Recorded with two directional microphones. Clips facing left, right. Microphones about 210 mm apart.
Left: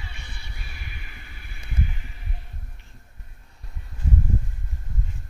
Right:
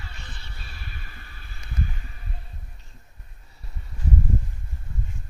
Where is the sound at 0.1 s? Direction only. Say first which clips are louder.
Even; 10° left (ahead or behind).